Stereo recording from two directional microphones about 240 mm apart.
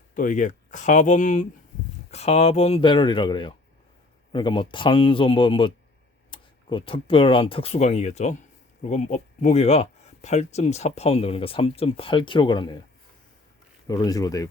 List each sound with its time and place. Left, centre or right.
0.1 s speech: left
13.8 s speech: centre